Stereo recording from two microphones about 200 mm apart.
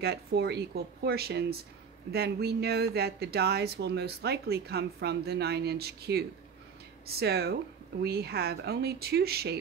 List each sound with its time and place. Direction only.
0.0 s speech: 55° right (ahead or behind)